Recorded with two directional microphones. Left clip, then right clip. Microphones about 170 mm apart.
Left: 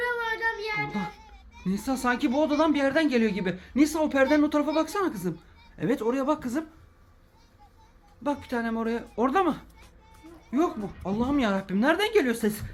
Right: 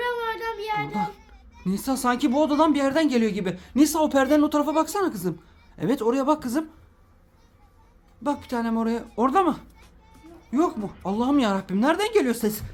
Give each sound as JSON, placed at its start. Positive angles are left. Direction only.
{"t": 0.0, "sound": "child singing", "side_deg": -70}
{"t": 0.8, "sound": "children playing", "side_deg": -10}
{"t": 1.6, "sound": "speech", "side_deg": -10}
{"t": 8.2, "sound": "speech", "side_deg": -15}